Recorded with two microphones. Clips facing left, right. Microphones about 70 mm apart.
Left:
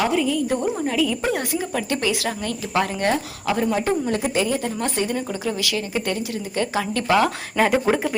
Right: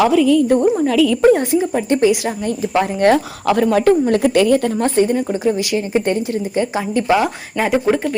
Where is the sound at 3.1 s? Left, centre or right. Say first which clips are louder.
Right 8 dB; right.